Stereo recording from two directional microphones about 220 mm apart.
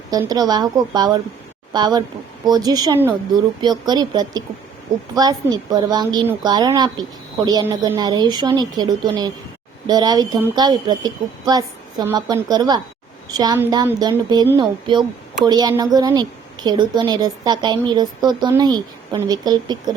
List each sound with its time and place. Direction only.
0.1 s a woman's voice: 15° right (ahead or behind)